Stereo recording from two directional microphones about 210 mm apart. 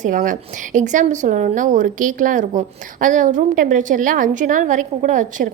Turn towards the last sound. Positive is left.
turn(degrees=-40)  # may be behind; listen again after turning